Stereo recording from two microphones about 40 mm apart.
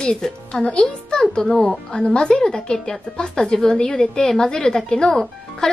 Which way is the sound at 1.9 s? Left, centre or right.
Left.